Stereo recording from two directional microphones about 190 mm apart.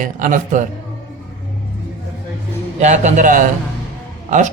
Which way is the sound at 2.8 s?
35° right (ahead or behind).